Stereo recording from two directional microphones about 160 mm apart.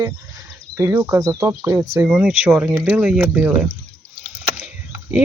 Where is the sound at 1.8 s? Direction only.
5° right (ahead or behind).